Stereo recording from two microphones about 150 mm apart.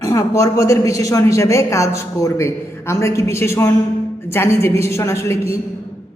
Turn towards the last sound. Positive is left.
turn(degrees=20)  # may be behind; listen again after turning